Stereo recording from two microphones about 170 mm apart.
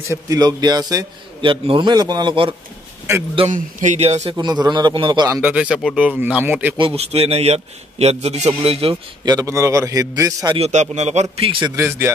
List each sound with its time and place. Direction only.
0.1 s a man's voice: 20° right (ahead or behind)
3.3 s a man's voice: 45° right (ahead or behind)
4.4 s a man's voice: 25° right (ahead or behind)
5.4 s speech: 10° right (ahead or behind)
6.8 s a man's voice: 35° right (ahead or behind)
10.6 s a man's voice: 40° right (ahead or behind)
11.7 s speech: 15° right (ahead or behind)